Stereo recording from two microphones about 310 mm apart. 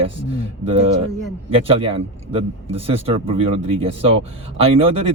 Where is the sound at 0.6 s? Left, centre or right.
Centre.